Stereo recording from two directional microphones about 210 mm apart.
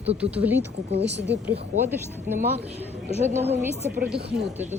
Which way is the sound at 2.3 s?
45° right (ahead or behind).